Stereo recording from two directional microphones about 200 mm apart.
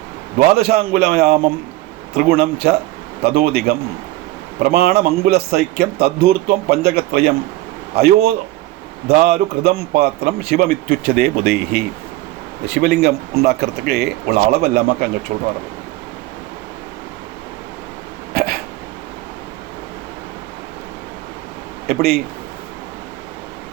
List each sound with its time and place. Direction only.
0.3 s a man's voice: 50° right (ahead or behind)
15.3 s speech: 30° right (ahead or behind)
18.3 s hiccup: 50° right (ahead or behind)
21.8 s a man's voice: 50° right (ahead or behind)